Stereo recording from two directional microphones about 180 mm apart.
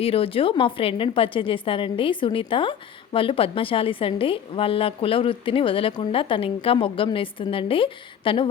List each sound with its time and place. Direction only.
0.0 s a woman's voice: 30° left (ahead or behind)